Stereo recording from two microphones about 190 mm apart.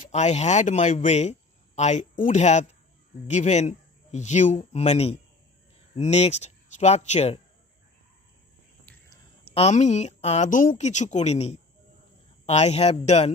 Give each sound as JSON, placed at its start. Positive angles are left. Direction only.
{"t": 0.0, "sound": "speech", "side_deg": 35}
{"t": 8.8, "sound": "a sound", "side_deg": 15}
{"t": 9.4, "sound": "speech", "side_deg": 30}